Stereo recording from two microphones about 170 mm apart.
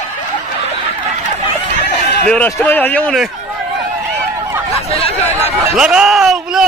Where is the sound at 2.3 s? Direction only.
10° left (ahead or behind).